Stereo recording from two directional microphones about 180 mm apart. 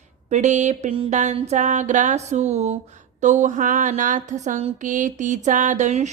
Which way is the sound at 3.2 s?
40° right (ahead or behind).